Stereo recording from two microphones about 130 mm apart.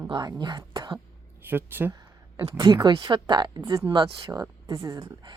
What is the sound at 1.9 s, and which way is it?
A woman's voice, 30° right (ahead or behind).